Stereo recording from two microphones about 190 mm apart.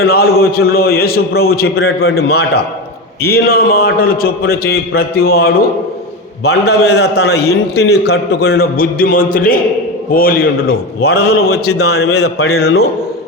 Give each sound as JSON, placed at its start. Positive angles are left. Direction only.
{"t": 0.1, "sound": "a man's voice", "side_deg": 55}